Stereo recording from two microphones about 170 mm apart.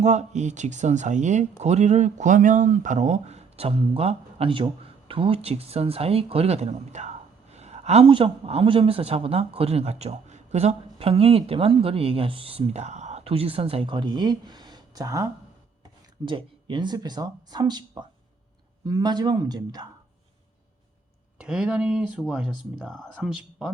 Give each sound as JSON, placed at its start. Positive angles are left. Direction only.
{"t": 0.0, "sound": "speech", "side_deg": -45}
{"t": 21.4, "sound": "speech", "side_deg": -5}